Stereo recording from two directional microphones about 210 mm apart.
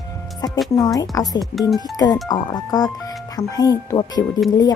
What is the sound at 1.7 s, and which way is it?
Speech, 20° left (ahead or behind).